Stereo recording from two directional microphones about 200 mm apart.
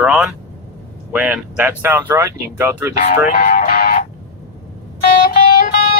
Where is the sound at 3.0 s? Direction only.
40° left (ahead or behind).